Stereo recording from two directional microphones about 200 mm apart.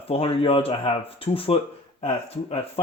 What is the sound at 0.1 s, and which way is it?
Speech, 30° left (ahead or behind).